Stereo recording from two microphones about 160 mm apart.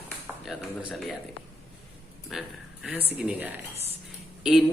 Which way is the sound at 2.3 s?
5° right (ahead or behind).